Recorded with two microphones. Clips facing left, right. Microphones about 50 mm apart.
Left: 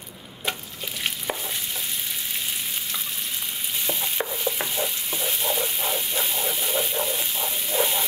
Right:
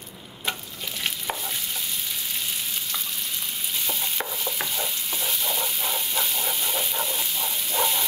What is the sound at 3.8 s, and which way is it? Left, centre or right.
Stir, left.